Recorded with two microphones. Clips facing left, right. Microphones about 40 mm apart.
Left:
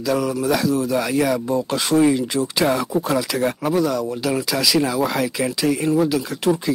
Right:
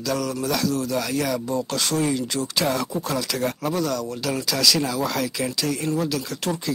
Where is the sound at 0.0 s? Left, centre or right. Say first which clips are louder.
Left 5 dB; centre.